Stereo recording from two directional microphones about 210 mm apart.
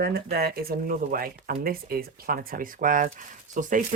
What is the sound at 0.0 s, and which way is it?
Speech, 50° right (ahead or behind).